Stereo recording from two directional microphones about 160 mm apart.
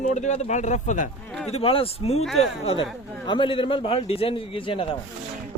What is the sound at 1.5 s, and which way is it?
Speech, 40° left (ahead or behind).